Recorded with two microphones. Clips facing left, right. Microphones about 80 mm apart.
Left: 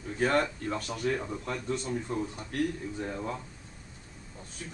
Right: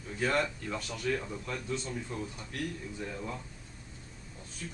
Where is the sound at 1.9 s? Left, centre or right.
Left.